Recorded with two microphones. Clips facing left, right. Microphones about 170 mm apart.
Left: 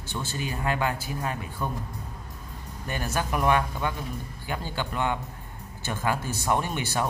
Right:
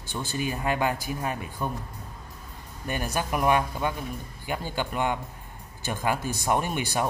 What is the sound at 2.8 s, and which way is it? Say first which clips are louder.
Speech: right 1 dB; 15° right (ahead or behind).